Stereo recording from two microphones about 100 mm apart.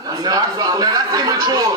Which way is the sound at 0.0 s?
40° right (ahead or behind).